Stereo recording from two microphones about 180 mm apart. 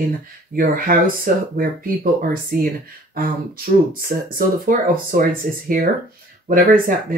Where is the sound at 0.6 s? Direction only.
50° right (ahead or behind).